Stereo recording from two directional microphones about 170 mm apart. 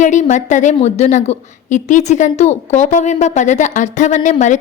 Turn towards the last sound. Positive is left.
turn(degrees=45)  # may be behind; listen again after turning